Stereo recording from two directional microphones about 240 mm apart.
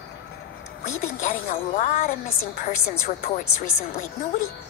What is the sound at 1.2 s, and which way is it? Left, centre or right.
A woman's voice, left.